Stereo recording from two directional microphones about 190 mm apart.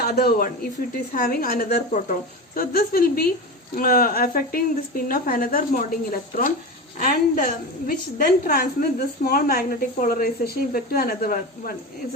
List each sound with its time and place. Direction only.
0.0 s a woman's voice: 55° left (ahead or behind)